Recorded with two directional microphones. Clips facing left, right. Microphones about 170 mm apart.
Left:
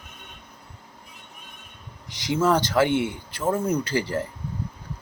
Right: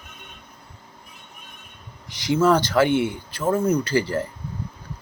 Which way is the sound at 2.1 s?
20° left (ahead or behind).